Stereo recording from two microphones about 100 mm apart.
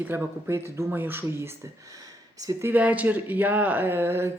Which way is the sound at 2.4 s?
35° right (ahead or behind).